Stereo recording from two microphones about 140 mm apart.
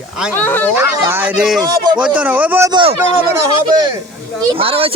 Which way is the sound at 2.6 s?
30° right (ahead or behind).